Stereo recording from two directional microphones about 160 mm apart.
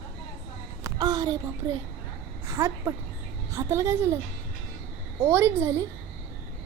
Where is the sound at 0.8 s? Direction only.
25° right (ahead or behind).